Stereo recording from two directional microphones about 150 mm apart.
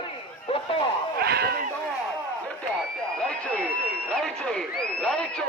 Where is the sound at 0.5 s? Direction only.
35° left (ahead or behind).